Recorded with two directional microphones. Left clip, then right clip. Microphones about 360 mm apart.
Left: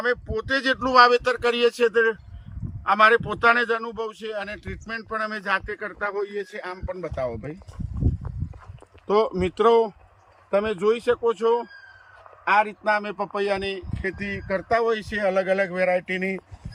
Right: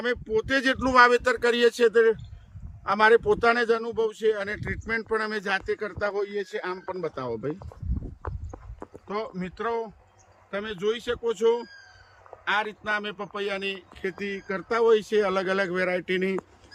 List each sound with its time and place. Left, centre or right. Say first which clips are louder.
0.0 s a man's voice: left 1 dB; centre
9.0 s speech: left 11 dB; centre